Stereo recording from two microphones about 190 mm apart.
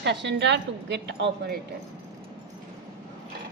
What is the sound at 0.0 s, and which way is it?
A woman's voice, 65° right (ahead or behind).